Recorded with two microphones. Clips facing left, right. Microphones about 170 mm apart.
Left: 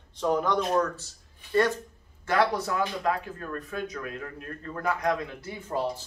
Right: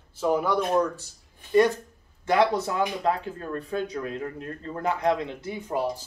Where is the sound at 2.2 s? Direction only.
20° right (ahead or behind).